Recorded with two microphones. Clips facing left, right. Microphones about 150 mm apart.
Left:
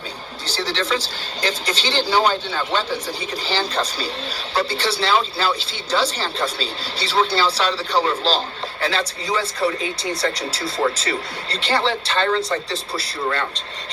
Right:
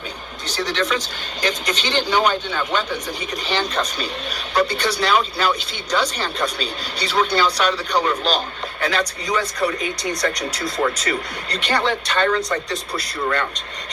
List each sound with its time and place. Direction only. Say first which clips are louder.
0.4 s a woman's voice: right 1 dB; 30° left (ahead or behind)